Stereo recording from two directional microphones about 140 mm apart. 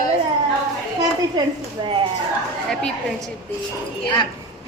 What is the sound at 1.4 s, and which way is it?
Speech, 30° right (ahead or behind).